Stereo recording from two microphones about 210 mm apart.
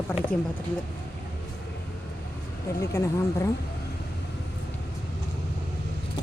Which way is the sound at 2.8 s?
15° left (ahead or behind).